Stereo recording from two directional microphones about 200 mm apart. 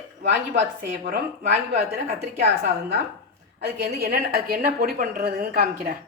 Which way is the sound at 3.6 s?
55° right (ahead or behind).